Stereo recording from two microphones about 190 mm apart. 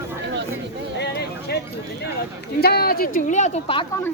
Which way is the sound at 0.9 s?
60° left (ahead or behind).